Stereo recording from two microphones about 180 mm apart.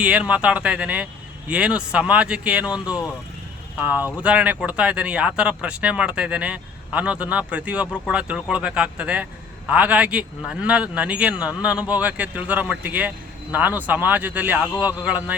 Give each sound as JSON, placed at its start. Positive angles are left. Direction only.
{"t": 0.0, "sound": "speech", "side_deg": -5}